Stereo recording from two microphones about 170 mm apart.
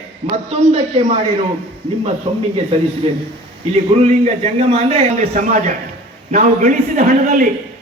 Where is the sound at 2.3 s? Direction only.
40° right (ahead or behind).